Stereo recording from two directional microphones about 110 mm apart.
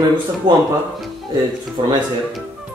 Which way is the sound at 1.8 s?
40° right (ahead or behind).